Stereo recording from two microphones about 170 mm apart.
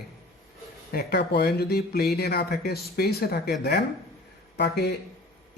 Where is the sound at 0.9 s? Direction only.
65° left (ahead or behind).